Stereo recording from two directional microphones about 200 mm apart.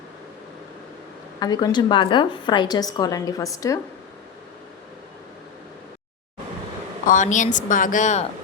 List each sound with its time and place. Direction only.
1.4 s a woman's voice: 20° left (ahead or behind)
7.0 s a woman's voice: 40° left (ahead or behind)